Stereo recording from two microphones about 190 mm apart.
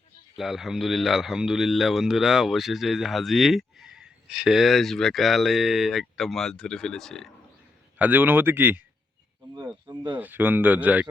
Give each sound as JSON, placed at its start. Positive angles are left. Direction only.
{"t": 0.3, "sound": "a man's voice", "side_deg": 0}
{"t": 7.9, "sound": "speech", "side_deg": -10}
{"t": 9.9, "sound": "speech", "side_deg": -20}
{"t": 10.2, "sound": "speech", "side_deg": -10}